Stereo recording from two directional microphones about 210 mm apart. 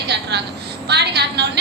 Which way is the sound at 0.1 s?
55° right (ahead or behind).